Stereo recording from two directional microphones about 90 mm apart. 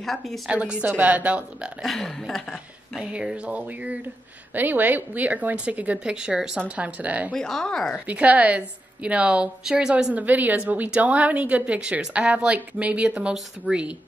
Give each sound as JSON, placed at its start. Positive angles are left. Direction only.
{"t": 0.0, "sound": "a woman's voice", "side_deg": 0}
{"t": 0.5, "sound": "a woman's voice", "side_deg": -15}
{"t": 1.8, "sound": "a woman's voice", "side_deg": 0}
{"t": 3.0, "sound": "a woman's voice", "side_deg": -10}
{"t": 7.3, "sound": "a woman's voice", "side_deg": 5}
{"t": 8.1, "sound": "a woman's voice", "side_deg": -15}
{"t": 10.2, "sound": "a woman's voice", "side_deg": -20}